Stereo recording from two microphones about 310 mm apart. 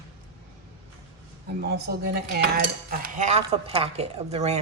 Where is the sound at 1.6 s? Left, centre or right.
Right.